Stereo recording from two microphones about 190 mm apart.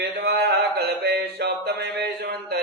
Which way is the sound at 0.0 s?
55° right (ahead or behind).